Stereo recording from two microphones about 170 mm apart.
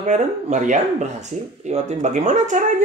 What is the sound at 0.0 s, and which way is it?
Speech, 45° right (ahead or behind).